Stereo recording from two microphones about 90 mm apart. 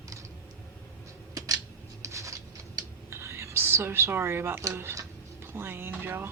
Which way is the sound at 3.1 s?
30° right (ahead or behind).